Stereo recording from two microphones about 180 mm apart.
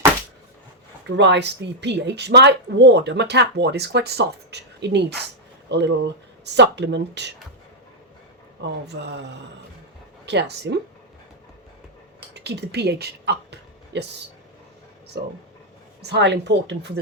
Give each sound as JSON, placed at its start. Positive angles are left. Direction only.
{"t": 1.0, "sound": "speech", "side_deg": -75}
{"t": 8.6, "sound": "speech", "side_deg": -70}
{"t": 12.3, "sound": "a sound", "side_deg": -70}
{"t": 16.0, "sound": "speech", "side_deg": -70}